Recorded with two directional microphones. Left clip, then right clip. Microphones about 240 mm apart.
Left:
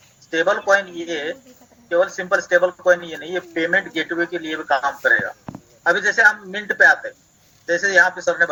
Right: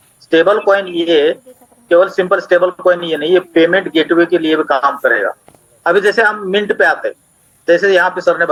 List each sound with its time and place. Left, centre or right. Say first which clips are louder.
0.3 s speech: right 7 dB; right